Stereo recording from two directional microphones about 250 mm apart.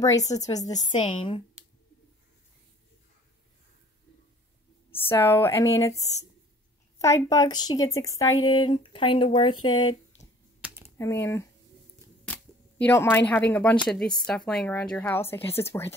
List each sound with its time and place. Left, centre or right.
0.4 s a woman's voice: centre
4.9 s a woman's voice: centre
11.0 s a woman's voice: centre
12.3 s camera: centre
12.8 s a woman's voice: centre